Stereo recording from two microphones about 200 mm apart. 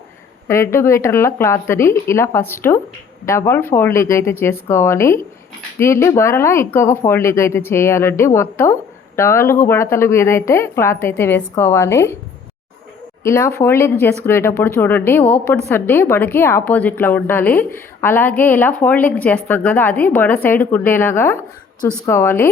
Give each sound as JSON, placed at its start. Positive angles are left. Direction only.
{"t": 0.4, "sound": "speech", "side_deg": 15}
{"t": 13.2, "sound": "speech", "side_deg": 15}